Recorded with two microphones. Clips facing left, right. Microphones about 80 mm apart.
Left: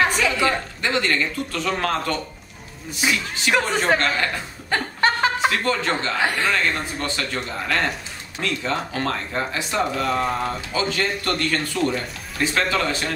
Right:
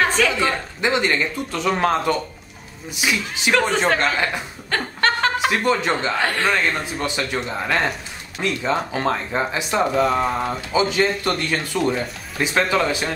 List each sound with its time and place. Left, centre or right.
0.0 s a woman's voice: centre
0.7 s a man's voice: centre
4.6 s chuckle: centre
5.5 s a man's voice: centre
9.9 s a man's voice: centre